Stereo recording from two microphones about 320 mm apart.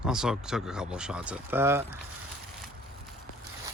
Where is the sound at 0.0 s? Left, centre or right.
Centre.